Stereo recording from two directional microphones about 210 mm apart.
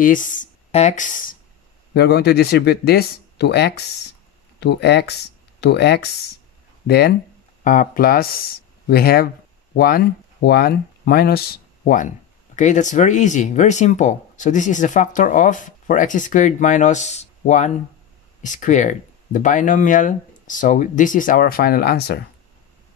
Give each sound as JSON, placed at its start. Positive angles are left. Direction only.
{"t": 0.0, "sound": "speech", "side_deg": 40}
{"t": 2.0, "sound": "speech", "side_deg": 50}